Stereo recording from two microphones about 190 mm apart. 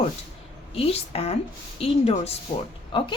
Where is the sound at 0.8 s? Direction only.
30° left (ahead or behind).